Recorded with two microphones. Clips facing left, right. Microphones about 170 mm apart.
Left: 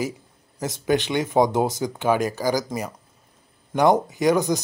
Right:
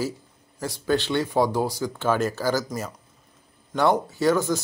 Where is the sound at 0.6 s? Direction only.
20° left (ahead or behind).